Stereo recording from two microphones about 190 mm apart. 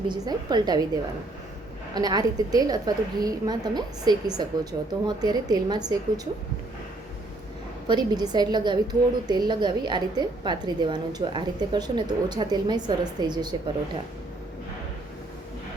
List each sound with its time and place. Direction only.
0.1 s a woman's voice: 20° right (ahead or behind)
2.0 s a woman's voice: 20° right (ahead or behind)
7.9 s a woman's voice: 20° right (ahead or behind)